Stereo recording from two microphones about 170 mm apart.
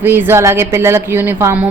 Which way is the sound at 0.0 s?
10° right (ahead or behind).